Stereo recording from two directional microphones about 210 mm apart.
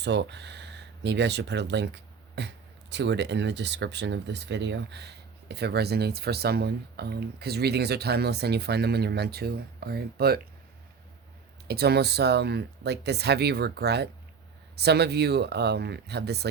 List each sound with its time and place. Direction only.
0.0 s speech: 55° right (ahead or behind)
11.7 s speech: 50° right (ahead or behind)